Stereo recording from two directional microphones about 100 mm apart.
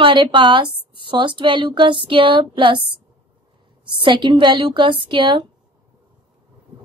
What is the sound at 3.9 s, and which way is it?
A woman's voice, 55° right (ahead or behind).